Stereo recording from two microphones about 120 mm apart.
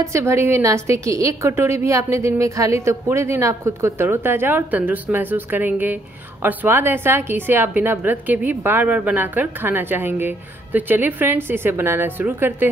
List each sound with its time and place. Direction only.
0.0 s a woman's voice: 25° right (ahead or behind)